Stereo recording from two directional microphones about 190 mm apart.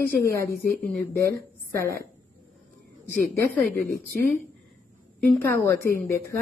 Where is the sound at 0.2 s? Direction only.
15° left (ahead or behind).